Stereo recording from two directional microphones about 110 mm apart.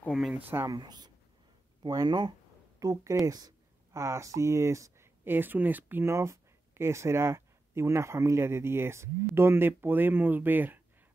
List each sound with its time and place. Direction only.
0.3 s speech: 20° right (ahead or behind)
0.7 s speech: 40° right (ahead or behind); by 10.8 s 15° right (ahead or behind)